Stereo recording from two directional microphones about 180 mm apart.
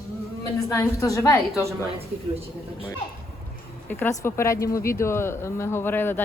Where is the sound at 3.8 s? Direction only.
15° left (ahead or behind).